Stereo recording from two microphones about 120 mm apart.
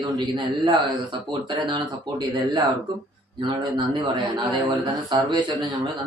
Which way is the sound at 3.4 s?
40° right (ahead or behind).